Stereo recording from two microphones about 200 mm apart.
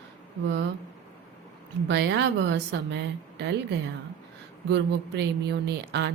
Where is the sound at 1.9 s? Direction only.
60° right (ahead or behind).